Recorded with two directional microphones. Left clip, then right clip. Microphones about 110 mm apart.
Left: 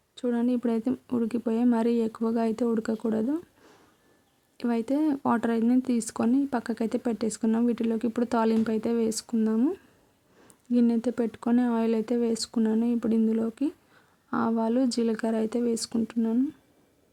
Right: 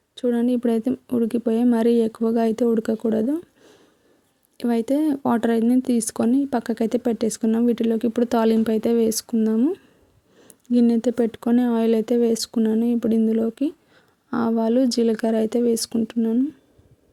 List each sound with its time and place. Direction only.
0.2 s speech: 30° right (ahead or behind)
4.5 s speech: 35° right (ahead or behind)